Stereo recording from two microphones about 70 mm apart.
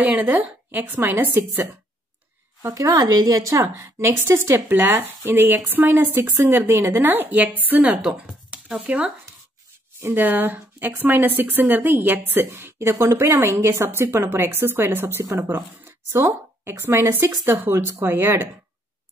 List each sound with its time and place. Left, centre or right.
0.0 s speech: right
2.6 s speech: right
4.2 s a woman's voice: right; by 8.8 s centre
8.8 s speech: centre
10.1 s a woman's voice: right